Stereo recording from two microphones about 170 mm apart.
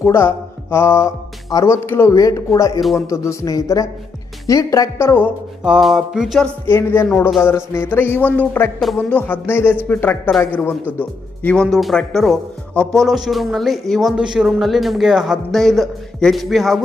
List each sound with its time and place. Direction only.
0.0 s a woman's voice: 15° left (ahead or behind)
5.6 s speech: centre (ahead or behind)
6.7 s speech: 15° left (ahead or behind)